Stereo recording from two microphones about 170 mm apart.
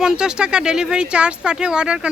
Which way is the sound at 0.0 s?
5° right (ahead or behind).